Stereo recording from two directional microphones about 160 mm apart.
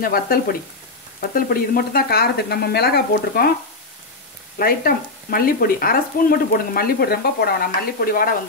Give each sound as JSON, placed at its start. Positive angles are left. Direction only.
{"t": 0.0, "sound": "speech", "side_deg": 65}
{"t": 4.6, "sound": "speech", "side_deg": 65}